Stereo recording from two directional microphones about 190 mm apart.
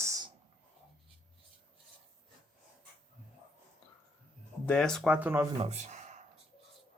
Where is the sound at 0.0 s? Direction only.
15° right (ahead or behind).